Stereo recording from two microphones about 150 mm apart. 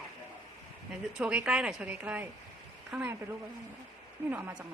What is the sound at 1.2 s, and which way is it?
A woman's voice, 5° right (ahead or behind).